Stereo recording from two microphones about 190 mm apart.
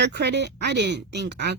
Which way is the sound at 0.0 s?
60° right (ahead or behind).